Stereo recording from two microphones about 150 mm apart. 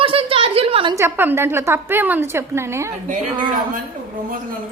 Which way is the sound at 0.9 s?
15° right (ahead or behind).